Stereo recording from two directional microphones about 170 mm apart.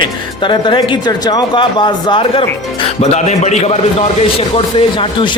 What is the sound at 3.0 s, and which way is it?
Speech, 40° left (ahead or behind).